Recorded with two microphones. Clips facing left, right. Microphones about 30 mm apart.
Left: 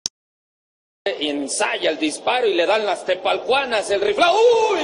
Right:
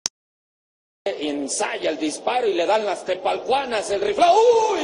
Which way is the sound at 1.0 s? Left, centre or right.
Left.